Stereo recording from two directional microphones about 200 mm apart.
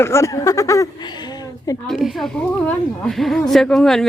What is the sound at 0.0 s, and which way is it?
Speech, 15° left (ahead or behind).